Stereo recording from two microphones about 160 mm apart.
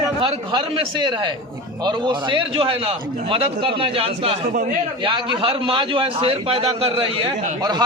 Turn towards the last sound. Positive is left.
turn(degrees=-35)  # may be behind; listen again after turning